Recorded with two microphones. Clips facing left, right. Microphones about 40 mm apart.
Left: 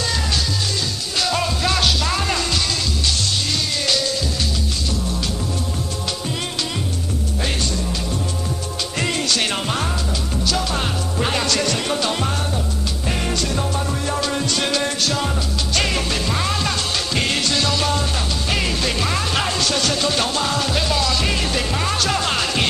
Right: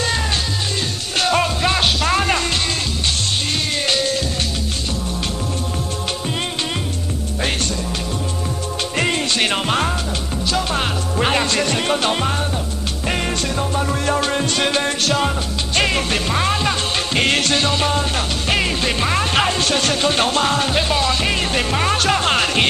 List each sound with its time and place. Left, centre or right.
0.0 s music: right
3.7 s music: right
8.9 s music: right
13.1 s music: right
13.6 s music: right
14.2 s music: right
14.6 s music: right
17.6 s music: right